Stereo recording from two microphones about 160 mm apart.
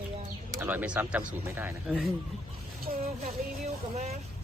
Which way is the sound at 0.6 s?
10° right (ahead or behind).